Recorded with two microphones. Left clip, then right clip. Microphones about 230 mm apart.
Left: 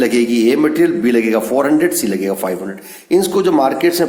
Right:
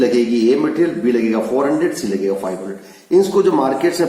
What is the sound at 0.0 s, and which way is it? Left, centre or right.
A man's voice, left.